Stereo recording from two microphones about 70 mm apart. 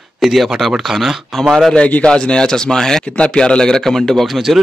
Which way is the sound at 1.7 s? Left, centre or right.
Centre.